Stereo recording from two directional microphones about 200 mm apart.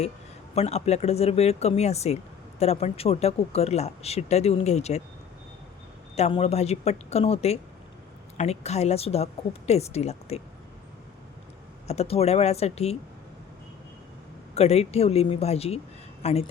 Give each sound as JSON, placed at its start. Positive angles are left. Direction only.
{"t": 0.5, "sound": "speech", "side_deg": 30}
{"t": 6.1, "sound": "speech", "side_deg": 30}
{"t": 11.9, "sound": "speech", "side_deg": 30}
{"t": 14.5, "sound": "speech", "side_deg": 30}